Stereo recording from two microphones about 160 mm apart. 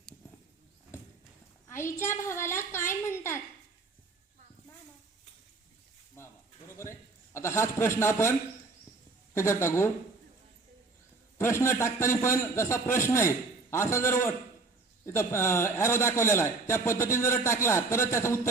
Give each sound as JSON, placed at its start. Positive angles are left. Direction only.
{"t": 1.6, "sound": "a man's voice", "side_deg": 15}
{"t": 6.1, "sound": "a sound", "side_deg": 15}
{"t": 7.3, "sound": "a man's voice", "side_deg": 15}
{"t": 11.3, "sound": "a man's voice", "side_deg": 15}